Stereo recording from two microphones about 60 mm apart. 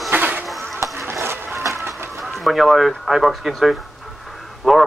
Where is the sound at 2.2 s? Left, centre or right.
Centre.